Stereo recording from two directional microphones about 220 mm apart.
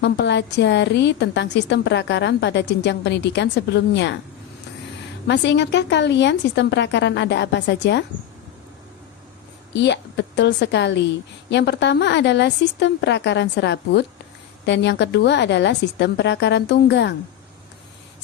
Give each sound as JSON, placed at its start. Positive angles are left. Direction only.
{"t": 0.0, "sound": "a woman's voice", "side_deg": 50}
{"t": 5.3, "sound": "a woman's voice", "side_deg": 50}
{"t": 9.7, "sound": "a woman's voice", "side_deg": 55}